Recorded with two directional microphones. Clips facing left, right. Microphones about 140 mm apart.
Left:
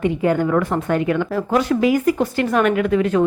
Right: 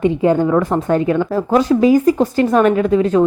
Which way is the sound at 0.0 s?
30° right (ahead or behind).